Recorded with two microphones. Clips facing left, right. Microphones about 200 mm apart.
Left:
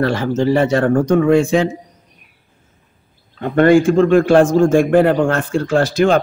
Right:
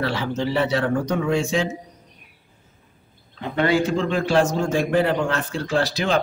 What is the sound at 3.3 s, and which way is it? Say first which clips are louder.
A man's voice: left 9 dB; 50° left (ahead or behind).